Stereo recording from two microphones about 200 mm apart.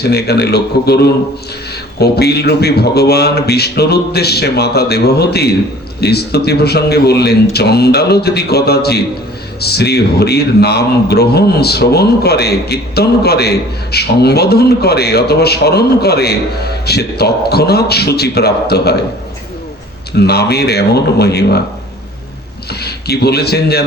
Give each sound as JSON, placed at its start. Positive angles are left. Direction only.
{"t": 0.0, "sound": "a man's voice", "side_deg": 55}
{"t": 20.1, "sound": "a man's voice", "side_deg": 55}
{"t": 22.7, "sound": "a man's voice", "side_deg": 55}